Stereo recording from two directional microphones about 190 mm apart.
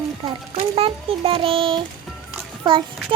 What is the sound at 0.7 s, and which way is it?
A child's voice, 30° right (ahead or behind).